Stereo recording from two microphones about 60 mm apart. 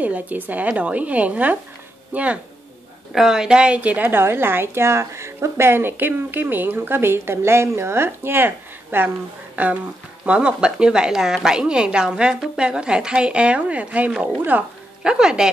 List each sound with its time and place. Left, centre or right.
0.0 s a woman's voice: right
3.1 s a woman's voice: centre; by 4.2 s right
4.2 s a woman's voice: right
10.2 s a woman's voice: centre
15.0 s a woman's voice: centre